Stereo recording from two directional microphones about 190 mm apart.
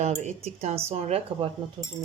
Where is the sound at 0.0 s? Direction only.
35° right (ahead or behind).